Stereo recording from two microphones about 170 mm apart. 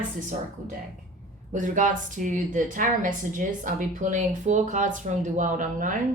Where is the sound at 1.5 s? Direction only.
50° right (ahead or behind).